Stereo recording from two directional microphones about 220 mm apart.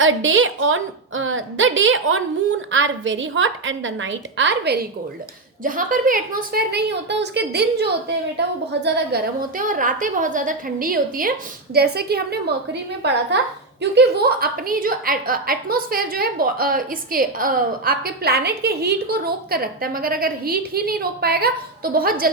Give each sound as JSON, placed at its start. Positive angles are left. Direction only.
{"t": 0.0, "sound": "a woman's voice", "side_deg": -60}